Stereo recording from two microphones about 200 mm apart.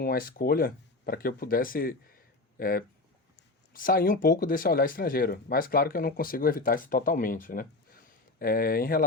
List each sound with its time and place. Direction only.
0.0 s speech: 45° left (ahead or behind)